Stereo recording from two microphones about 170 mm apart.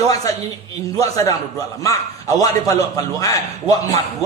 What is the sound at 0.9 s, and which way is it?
Speech, 20° left (ahead or behind).